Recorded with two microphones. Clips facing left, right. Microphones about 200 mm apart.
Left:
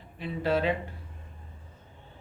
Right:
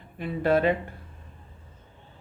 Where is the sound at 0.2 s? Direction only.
55° right (ahead or behind).